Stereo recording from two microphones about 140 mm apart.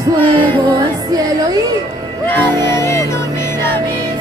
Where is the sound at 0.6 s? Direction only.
30° right (ahead or behind).